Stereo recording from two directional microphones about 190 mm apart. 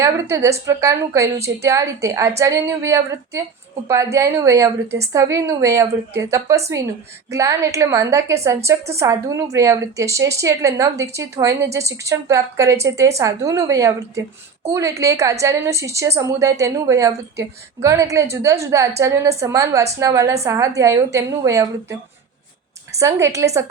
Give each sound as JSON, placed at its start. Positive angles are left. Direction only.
{"t": 0.0, "sound": "a woman's voice", "side_deg": -15}
{"t": 7.3, "sound": "a woman's voice", "side_deg": -15}
{"t": 23.0, "sound": "a woman's voice", "side_deg": -15}